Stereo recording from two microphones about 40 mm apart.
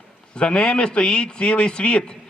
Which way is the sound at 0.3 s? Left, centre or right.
Left.